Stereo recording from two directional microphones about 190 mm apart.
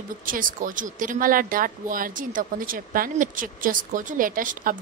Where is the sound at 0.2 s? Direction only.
45° right (ahead or behind).